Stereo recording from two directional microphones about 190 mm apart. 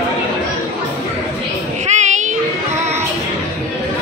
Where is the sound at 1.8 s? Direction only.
40° right (ahead or behind).